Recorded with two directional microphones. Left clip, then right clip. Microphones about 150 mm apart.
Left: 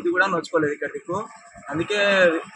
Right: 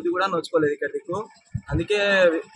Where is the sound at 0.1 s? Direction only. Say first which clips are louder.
Left 2 dB; 35° right (ahead or behind).